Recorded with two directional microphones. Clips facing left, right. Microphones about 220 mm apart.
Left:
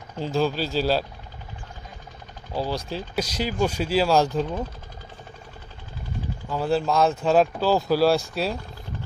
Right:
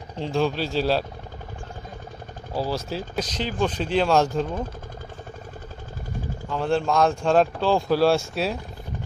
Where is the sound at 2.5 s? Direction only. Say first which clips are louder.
Right 1 dB; centre (ahead or behind).